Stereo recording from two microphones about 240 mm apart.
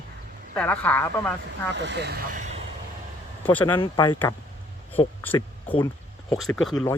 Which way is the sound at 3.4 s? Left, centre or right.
Centre.